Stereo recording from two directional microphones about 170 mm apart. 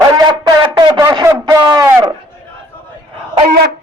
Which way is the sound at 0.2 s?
25° right (ahead or behind).